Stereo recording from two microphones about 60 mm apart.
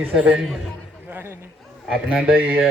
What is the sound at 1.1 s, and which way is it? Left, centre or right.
Chatter, right.